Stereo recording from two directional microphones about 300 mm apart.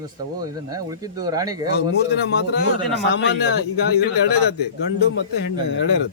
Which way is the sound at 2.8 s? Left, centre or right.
Left.